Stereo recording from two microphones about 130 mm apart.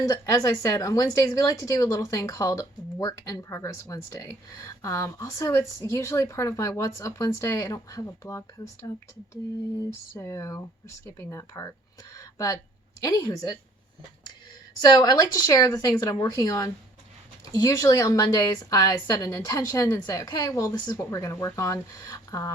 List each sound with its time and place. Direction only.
0.1 s a woman's voice: 25° left (ahead or behind)
10.2 s a woman's voice: 25° left (ahead or behind)
12.1 s a sound: 25° left (ahead or behind)
13.0 s a woman's voice: 30° left (ahead or behind)
14.9 s a woman's voice: 25° left (ahead or behind)